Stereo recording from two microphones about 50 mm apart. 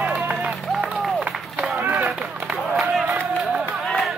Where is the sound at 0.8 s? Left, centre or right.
Centre.